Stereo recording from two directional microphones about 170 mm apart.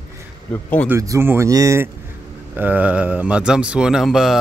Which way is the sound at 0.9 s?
15° right (ahead or behind).